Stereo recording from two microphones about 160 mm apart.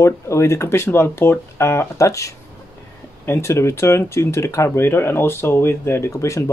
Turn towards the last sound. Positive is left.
turn(degrees=20)  # may be behind; listen again after turning